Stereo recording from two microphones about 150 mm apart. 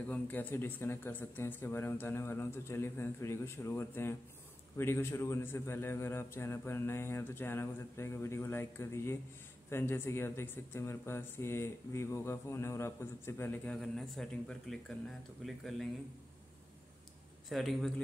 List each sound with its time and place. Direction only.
0.0 s a man's voice: 10° left (ahead or behind)
13.7 s speech: centre (ahead or behind)
17.5 s speech: centre (ahead or behind)